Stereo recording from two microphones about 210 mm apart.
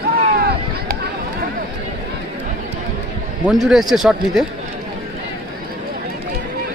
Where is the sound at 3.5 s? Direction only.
Centre (ahead or behind).